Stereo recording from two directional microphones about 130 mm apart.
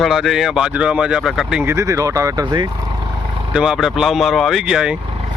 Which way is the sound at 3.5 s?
5° right (ahead or behind).